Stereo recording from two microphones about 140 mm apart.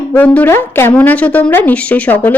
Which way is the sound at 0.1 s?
10° left (ahead or behind).